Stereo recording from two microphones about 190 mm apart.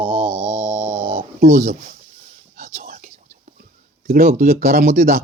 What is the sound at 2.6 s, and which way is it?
Whispering, 50° right (ahead or behind).